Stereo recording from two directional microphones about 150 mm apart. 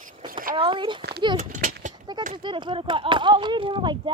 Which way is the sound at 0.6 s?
35° right (ahead or behind).